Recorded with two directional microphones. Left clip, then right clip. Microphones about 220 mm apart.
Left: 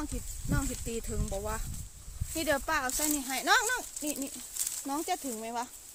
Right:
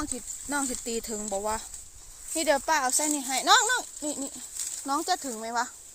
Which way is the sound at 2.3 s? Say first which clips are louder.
Right 5 dB; 15° right (ahead or behind).